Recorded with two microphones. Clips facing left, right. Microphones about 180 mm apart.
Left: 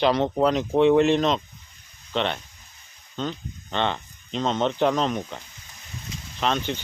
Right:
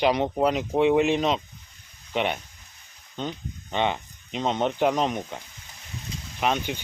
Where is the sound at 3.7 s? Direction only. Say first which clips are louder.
Even; 10° right (ahead or behind).